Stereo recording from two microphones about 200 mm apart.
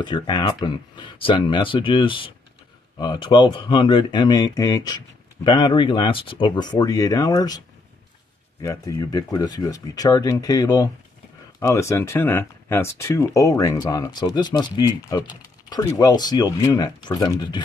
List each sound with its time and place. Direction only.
0.0 s speech: 25° left (ahead or behind)
8.6 s speech: 15° left (ahead or behind)